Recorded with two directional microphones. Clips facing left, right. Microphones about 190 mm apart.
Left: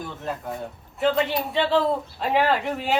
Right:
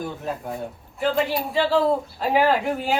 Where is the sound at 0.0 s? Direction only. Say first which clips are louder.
Right 2 dB; centre (ahead or behind).